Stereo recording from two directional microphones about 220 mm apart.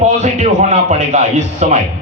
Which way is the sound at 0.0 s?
30° right (ahead or behind).